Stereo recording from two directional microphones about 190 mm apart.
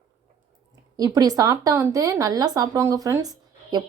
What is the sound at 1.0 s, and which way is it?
Speech, 20° right (ahead or behind).